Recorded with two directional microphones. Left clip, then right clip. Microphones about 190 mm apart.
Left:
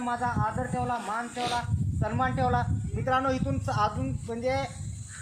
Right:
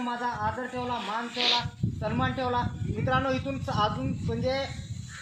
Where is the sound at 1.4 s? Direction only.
10° left (ahead or behind).